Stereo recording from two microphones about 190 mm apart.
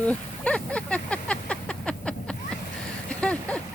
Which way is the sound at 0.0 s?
5° left (ahead or behind).